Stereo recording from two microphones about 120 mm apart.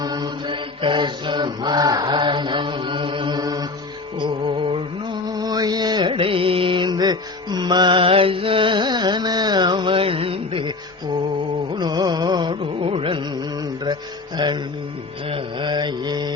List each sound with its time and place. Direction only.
0.0 s mantra: 35° right (ahead or behind)
4.2 s music: 45° right (ahead or behind)
5.3 s music: 30° right (ahead or behind)
11.7 s a sound: 35° right (ahead or behind)
13.8 s music: 35° right (ahead or behind)
15.3 s mantra: 45° right (ahead or behind)